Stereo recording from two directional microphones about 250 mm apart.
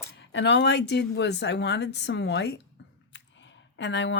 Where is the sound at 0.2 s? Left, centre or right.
Left.